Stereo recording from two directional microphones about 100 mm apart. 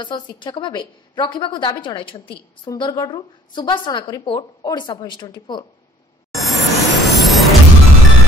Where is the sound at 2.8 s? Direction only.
45° left (ahead or behind).